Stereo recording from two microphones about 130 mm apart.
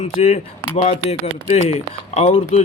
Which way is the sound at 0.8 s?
55° left (ahead or behind).